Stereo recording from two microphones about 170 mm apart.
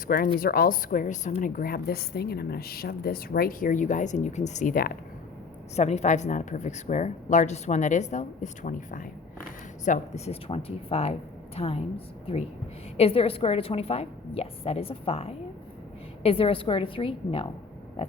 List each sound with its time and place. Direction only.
0.1 s a woman's voice: 60° left (ahead or behind)
5.7 s a woman's voice: 40° left (ahead or behind)